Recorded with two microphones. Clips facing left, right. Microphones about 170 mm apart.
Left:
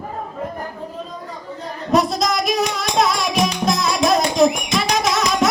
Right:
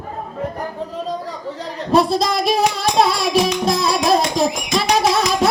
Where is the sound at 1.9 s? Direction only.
30° right (ahead or behind).